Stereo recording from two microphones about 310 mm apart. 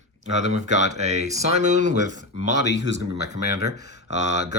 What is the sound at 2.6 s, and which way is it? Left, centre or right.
Speech, left.